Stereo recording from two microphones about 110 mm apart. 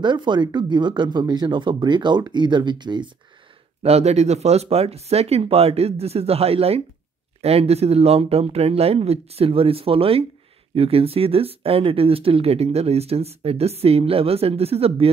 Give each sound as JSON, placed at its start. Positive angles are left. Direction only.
{"t": 0.0, "sound": "speech", "side_deg": -45}
{"t": 3.8, "sound": "speech", "side_deg": -80}